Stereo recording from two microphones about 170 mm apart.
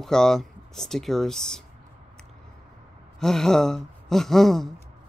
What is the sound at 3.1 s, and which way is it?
Speech, centre (ahead or behind).